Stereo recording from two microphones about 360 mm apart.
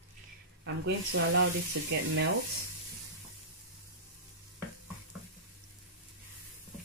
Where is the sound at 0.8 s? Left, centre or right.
Right.